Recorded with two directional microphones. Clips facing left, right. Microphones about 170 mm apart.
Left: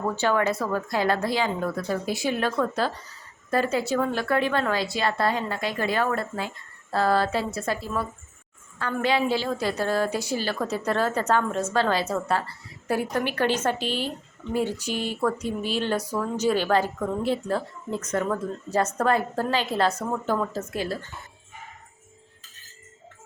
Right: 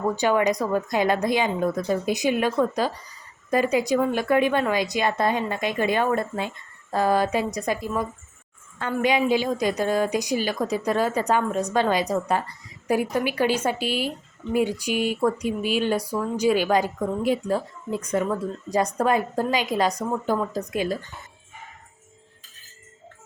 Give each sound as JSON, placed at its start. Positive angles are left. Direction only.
{"t": 0.2, "sound": "speech", "side_deg": -15}